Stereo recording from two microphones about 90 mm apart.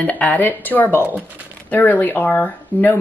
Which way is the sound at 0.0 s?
15° left (ahead or behind).